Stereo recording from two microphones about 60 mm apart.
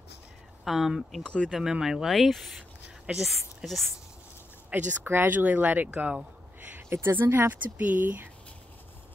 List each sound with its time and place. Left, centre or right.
0.7 s speech: centre
1.2 s speech: centre
1.5 s speech: centre
4.7 s speech: right
6.9 s speech: right